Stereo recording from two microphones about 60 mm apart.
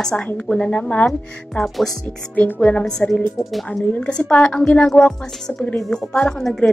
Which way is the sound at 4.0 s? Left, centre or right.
Centre.